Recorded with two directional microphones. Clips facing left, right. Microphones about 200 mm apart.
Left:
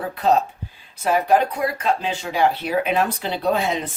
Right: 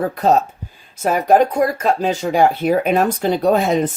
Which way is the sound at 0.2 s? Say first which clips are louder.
Right 1 dB; 45° right (ahead or behind).